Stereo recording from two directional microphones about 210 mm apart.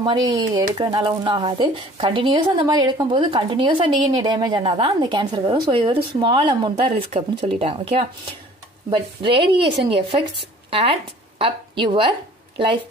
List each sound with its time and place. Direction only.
0.0 s a woman's voice: 20° right (ahead or behind)